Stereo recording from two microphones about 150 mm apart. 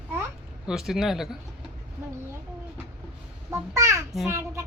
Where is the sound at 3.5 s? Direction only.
20° right (ahead or behind).